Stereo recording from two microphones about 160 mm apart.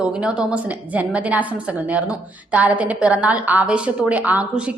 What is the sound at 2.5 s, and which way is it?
A woman's voice, 10° right (ahead or behind).